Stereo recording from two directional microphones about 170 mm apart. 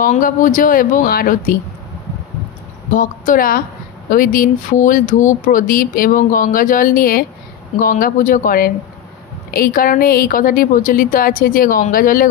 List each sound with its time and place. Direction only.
0.0 s speech: 50° left (ahead or behind)
2.9 s a woman's voice: 50° left (ahead or behind)